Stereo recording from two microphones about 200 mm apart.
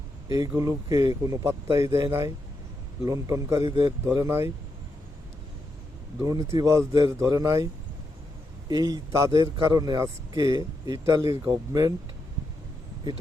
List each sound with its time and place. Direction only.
0.3 s a man's voice: 20° right (ahead or behind)
4.1 s speech: 10° right (ahead or behind)
6.1 s speech: 15° right (ahead or behind)
8.7 s speech: 20° right (ahead or behind)